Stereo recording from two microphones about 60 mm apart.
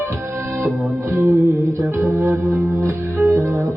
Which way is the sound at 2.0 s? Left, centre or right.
Right.